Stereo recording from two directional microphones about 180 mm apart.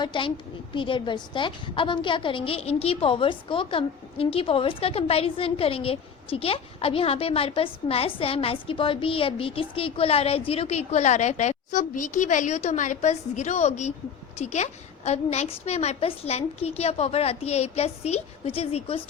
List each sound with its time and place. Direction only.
0.0 s a woman's voice: 25° left (ahead or behind)